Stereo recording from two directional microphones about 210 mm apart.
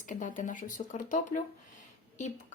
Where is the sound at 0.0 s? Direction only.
40° left (ahead or behind).